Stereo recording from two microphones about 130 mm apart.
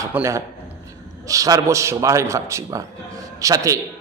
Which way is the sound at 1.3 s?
25° right (ahead or behind).